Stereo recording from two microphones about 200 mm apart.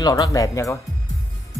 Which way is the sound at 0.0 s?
20° left (ahead or behind).